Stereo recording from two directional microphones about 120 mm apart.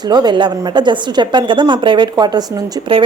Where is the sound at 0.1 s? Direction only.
35° right (ahead or behind).